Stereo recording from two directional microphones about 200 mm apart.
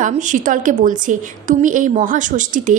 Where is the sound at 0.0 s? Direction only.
40° right (ahead or behind).